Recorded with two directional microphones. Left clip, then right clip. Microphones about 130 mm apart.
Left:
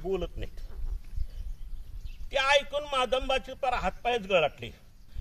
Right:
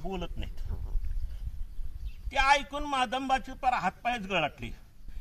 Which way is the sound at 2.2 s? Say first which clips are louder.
Even; 25° left (ahead or behind).